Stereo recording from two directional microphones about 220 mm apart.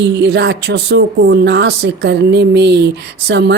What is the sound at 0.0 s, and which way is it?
Speech, 50° right (ahead or behind).